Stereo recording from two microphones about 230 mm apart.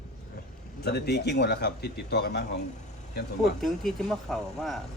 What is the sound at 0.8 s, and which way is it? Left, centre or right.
Speech, left.